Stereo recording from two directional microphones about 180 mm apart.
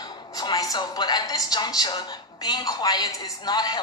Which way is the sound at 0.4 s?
20° left (ahead or behind).